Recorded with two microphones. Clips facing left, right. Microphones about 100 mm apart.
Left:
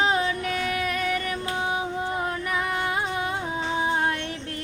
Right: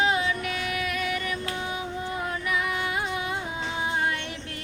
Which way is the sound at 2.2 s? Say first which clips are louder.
Left 1 dB; 35° left (ahead or behind).